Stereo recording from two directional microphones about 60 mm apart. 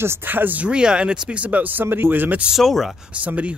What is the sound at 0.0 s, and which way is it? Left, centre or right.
Speech, right.